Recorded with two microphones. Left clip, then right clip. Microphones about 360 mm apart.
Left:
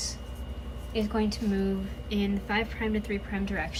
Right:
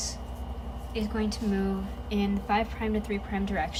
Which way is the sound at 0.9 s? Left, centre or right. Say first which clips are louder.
Left 3 dB; centre.